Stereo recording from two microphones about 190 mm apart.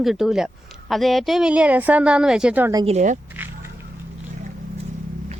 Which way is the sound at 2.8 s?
40° right (ahead or behind).